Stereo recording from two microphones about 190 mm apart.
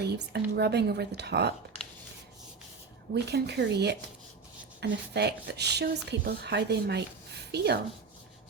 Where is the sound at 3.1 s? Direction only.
60° right (ahead or behind).